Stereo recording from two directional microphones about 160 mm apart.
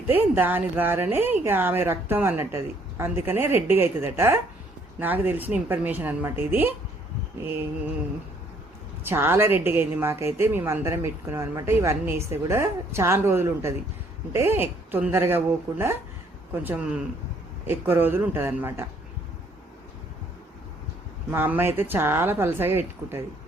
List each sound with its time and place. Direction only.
0.1 s a woman's voice: 10° right (ahead or behind)
9.0 s a woman's voice: 15° right (ahead or behind)
21.2 s a woman's voice: 10° right (ahead or behind)